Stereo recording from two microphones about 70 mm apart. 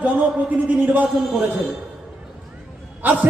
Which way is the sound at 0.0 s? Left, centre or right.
Right.